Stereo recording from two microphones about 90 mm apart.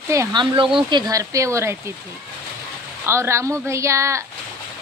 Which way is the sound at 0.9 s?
40° right (ahead or behind).